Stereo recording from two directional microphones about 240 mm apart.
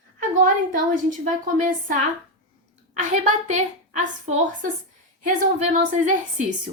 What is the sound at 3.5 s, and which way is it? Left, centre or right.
A woman's voice, right.